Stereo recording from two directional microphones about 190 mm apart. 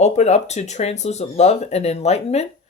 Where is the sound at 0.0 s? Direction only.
35° left (ahead or behind).